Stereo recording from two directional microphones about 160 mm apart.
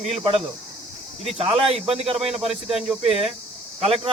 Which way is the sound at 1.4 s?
40° right (ahead or behind).